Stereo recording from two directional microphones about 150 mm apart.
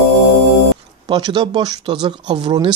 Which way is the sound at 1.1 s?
30° right (ahead or behind).